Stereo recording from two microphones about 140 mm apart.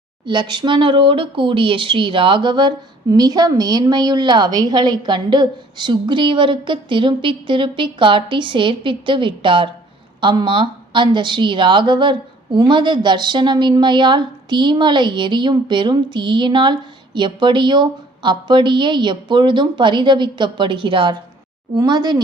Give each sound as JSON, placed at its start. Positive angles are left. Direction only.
{"t": 0.3, "sound": "speech", "side_deg": -35}